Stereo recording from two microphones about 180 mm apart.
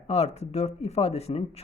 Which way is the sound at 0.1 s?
35° left (ahead or behind).